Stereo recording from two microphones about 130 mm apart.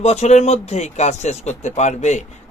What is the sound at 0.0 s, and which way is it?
Speech, 55° left (ahead or behind).